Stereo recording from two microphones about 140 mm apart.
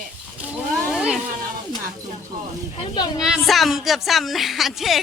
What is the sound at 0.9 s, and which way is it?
Speech, 5° right (ahead or behind).